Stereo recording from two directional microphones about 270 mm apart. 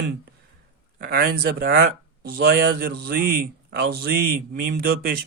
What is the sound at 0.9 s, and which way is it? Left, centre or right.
A man's voice, right.